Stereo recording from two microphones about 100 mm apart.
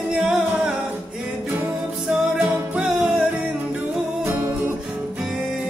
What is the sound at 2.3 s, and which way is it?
Music, 15° right (ahead or behind).